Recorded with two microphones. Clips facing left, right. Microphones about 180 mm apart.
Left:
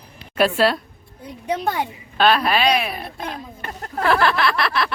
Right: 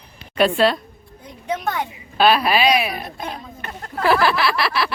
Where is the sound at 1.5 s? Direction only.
30° left (ahead or behind).